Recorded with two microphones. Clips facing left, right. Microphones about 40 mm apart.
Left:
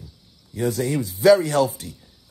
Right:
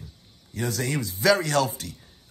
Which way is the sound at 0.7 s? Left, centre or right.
Right.